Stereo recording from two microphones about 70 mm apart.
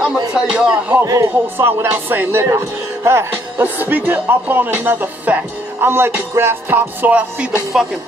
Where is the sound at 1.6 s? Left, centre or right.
Right.